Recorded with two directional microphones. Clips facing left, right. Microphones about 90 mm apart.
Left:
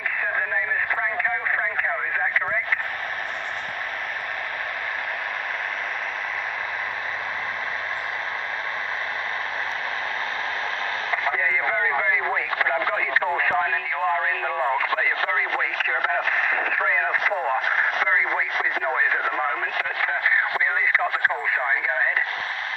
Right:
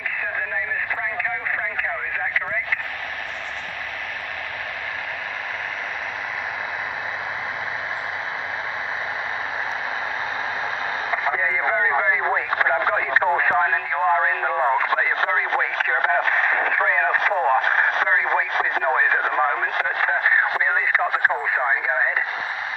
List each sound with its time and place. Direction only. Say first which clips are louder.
11.1 s radio: right 1 dB; 15° right (ahead or behind)
21.0 s radio: right 2 dB; 20° right (ahead or behind)